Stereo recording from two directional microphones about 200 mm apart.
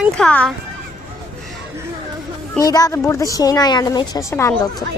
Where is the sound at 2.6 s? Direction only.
20° left (ahead or behind).